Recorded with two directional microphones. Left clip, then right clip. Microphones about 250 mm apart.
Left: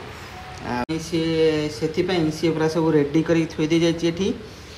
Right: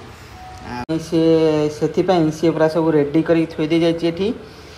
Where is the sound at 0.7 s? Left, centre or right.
Centre.